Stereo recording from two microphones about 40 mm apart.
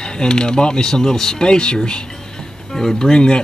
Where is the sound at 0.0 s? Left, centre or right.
Centre.